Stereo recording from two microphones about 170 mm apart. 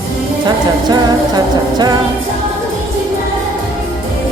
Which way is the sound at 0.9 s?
25° right (ahead or behind).